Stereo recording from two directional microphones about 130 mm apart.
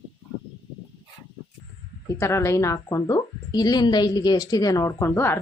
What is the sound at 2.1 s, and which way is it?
Speech, 20° left (ahead or behind).